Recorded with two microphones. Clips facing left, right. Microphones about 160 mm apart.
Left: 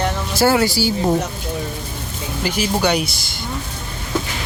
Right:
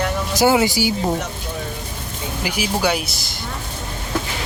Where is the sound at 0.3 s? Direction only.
15° right (ahead or behind).